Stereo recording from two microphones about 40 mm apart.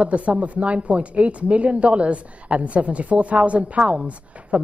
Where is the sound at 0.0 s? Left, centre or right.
Right.